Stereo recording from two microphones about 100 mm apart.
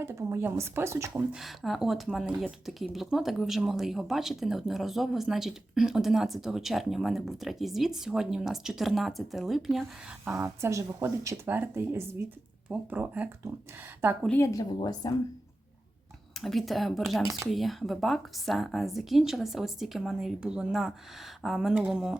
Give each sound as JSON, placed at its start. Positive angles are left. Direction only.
{"t": 0.0, "sound": "speech", "side_deg": -25}
{"t": 1.3, "sound": "speech", "side_deg": 0}
{"t": 10.2, "sound": "speech", "side_deg": -30}
{"t": 11.4, "sound": "speech", "side_deg": -20}
{"t": 14.3, "sound": "a woman's voice", "side_deg": 30}
{"t": 16.3, "sound": "speech", "side_deg": 0}